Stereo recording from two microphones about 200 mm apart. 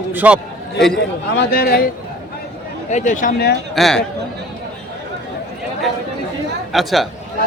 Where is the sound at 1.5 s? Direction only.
50° left (ahead or behind).